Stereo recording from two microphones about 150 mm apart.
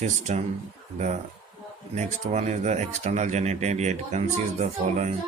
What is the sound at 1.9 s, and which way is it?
Speech, 50° right (ahead or behind).